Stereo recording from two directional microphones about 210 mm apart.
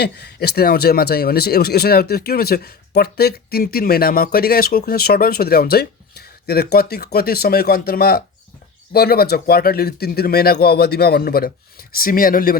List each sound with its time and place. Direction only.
0.0 s speech: 50° left (ahead or behind)